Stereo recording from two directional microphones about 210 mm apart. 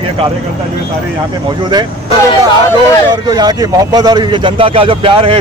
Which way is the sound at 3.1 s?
20° right (ahead or behind).